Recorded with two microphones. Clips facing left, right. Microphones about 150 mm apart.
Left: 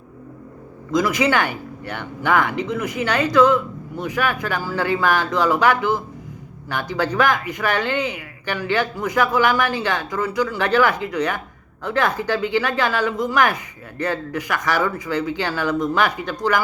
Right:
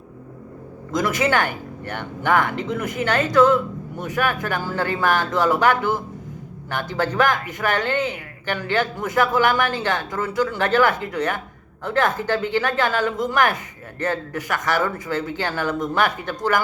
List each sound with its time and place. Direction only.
0.9 s speech: 45° right (ahead or behind)